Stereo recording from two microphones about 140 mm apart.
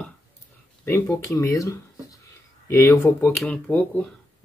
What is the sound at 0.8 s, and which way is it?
Speech, 20° left (ahead or behind).